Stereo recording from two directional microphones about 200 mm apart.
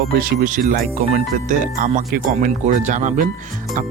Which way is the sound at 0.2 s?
40° right (ahead or behind).